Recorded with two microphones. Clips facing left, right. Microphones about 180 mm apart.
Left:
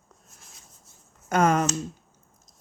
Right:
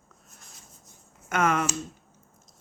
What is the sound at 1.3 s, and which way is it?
Speech, 35° left (ahead or behind).